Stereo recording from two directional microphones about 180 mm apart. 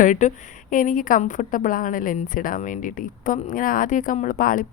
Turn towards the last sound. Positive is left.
turn(degrees=50)  # may be behind; listen again after turning